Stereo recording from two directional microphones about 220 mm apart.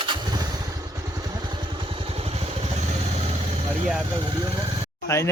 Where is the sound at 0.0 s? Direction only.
20° right (ahead or behind).